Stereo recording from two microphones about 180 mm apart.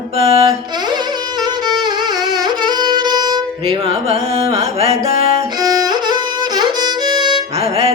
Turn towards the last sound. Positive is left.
turn(degrees=-30)  # may be behind; listen again after turning